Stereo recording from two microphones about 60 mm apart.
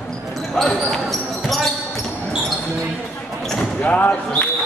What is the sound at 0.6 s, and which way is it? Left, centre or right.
Speech, centre.